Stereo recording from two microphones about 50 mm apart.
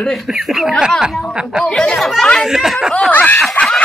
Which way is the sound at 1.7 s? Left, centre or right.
Centre.